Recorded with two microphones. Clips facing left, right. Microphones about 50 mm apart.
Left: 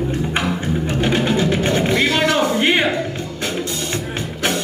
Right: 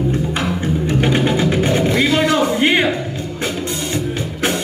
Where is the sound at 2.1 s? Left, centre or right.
Left.